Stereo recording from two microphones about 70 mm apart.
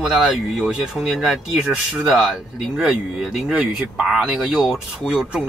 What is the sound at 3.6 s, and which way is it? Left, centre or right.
Speech, right.